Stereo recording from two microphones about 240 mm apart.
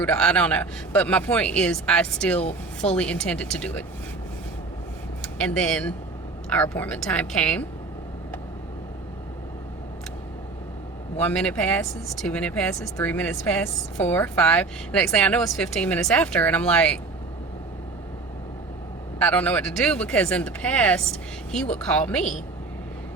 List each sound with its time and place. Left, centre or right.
0.0 s speech: centre
5.4 s speech: centre
11.2 s speech: centre
19.2 s speech: centre